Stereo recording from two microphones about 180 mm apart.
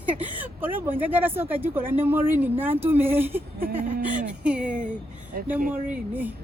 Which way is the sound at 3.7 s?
50° right (ahead or behind).